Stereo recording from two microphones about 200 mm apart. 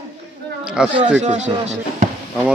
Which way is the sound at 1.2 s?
35° right (ahead or behind).